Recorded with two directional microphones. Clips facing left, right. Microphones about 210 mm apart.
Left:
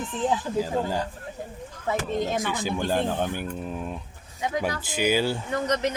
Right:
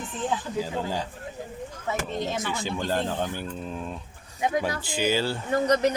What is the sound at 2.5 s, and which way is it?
Speech, 15° left (ahead or behind).